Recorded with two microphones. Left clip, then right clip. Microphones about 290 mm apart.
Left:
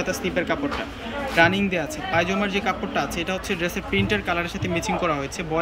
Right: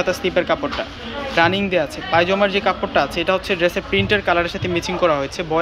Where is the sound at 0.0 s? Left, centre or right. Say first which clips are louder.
Right 6 dB; centre.